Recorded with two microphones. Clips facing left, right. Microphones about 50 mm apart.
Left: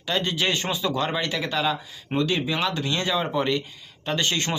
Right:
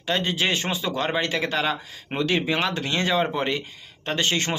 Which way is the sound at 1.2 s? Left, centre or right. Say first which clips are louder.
Right 1 dB; right.